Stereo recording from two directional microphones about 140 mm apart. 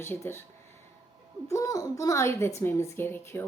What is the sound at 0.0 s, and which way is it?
Speech, 15° left (ahead or behind).